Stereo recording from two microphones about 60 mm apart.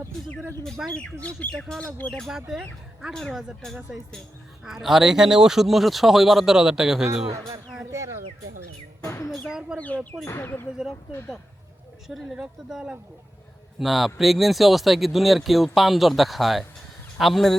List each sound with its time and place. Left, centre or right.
0.8 s speech: centre
1.4 s speech: left
2.2 s speech: centre
3.1 s speech: centre
4.6 s speech: centre
7.9 s bird: right
9.5 s speech: centre
9.7 s speech: left
10.4 s speech: left
12.0 s speech: centre
13.7 s speech: centre